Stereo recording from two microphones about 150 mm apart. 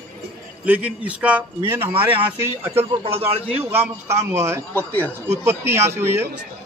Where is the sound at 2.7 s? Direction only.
40° right (ahead or behind).